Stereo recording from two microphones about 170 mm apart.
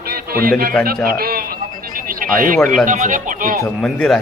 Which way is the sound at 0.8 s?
60° right (ahead or behind).